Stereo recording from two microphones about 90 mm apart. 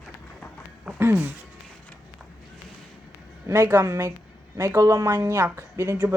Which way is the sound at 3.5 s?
30° right (ahead or behind).